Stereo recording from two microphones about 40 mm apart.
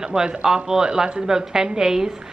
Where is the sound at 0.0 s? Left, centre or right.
Centre.